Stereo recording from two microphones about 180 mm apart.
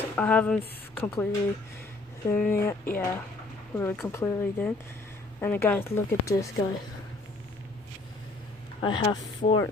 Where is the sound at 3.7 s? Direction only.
15° left (ahead or behind).